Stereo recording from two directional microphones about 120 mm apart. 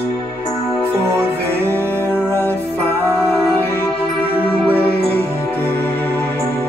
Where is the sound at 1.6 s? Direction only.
15° left (ahead or behind).